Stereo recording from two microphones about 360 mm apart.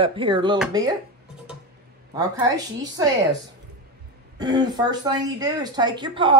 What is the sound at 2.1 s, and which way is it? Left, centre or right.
Speech, centre.